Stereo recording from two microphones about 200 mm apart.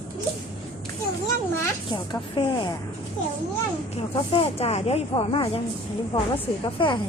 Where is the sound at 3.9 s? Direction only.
30° left (ahead or behind).